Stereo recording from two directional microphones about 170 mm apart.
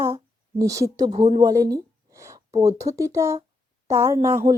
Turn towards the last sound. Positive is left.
turn(degrees=-15)  # may be behind; listen again after turning